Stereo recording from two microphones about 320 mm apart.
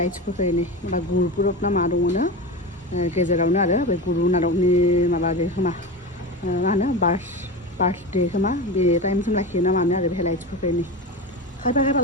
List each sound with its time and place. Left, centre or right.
0.0 s speech: left